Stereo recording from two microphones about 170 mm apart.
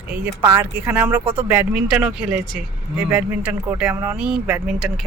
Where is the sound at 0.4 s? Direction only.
15° right (ahead or behind).